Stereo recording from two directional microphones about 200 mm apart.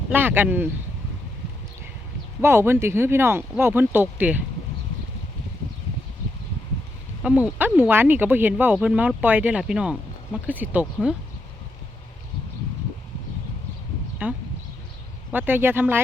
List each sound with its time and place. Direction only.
0.1 s speech: 10° right (ahead or behind)
2.4 s speech: 10° right (ahead or behind)
7.2 s speech: 5° right (ahead or behind)
14.2 s speech: 10° right (ahead or behind)